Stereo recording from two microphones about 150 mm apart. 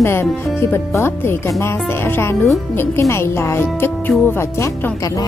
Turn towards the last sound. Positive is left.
turn(degrees=25)  # may be behind; listen again after turning